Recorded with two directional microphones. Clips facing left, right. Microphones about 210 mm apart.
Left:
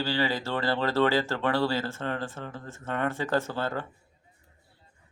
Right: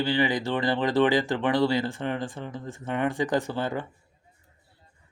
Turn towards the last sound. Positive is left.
turn(degrees=-15)  # may be behind; listen again after turning